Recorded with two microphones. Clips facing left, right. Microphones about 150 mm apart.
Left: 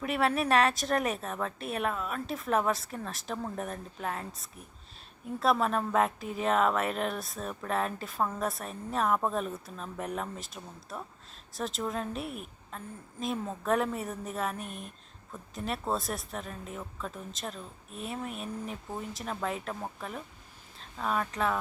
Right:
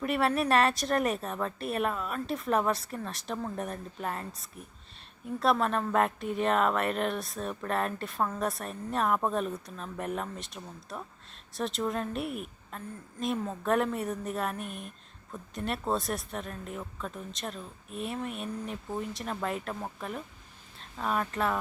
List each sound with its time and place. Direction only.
0.0 s speech: centre (ahead or behind)